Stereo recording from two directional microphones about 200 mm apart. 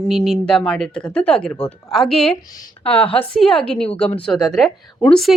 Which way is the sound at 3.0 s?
25° left (ahead or behind).